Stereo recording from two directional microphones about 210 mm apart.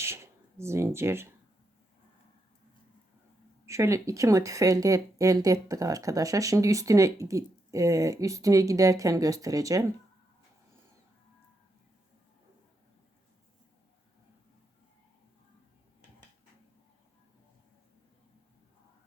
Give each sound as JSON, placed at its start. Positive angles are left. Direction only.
{"t": 0.0, "sound": "speech", "side_deg": -10}
{"t": 3.7, "sound": "speech", "side_deg": -15}